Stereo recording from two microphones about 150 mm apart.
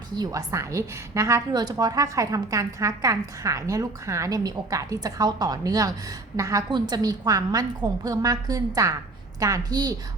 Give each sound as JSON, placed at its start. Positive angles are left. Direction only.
{"t": 0.1, "sound": "a woman's voice", "side_deg": -25}